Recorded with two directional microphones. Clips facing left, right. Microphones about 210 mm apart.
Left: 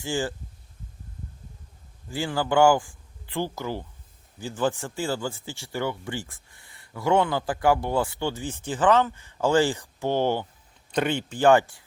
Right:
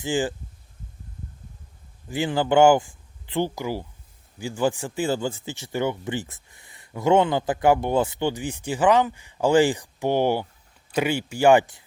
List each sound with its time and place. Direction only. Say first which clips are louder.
0.0 s speech: right 4 dB; 15° right (ahead or behind)
2.0 s speech: right 4 dB; 20° right (ahead or behind)